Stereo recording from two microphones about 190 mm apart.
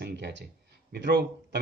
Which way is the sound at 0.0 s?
65° right (ahead or behind).